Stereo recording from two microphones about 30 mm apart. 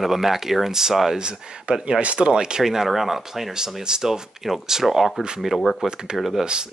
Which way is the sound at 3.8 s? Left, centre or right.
Right.